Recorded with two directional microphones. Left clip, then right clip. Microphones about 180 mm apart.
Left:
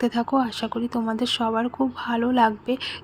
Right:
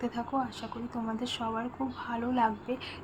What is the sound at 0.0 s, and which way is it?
Speech, 40° left (ahead or behind).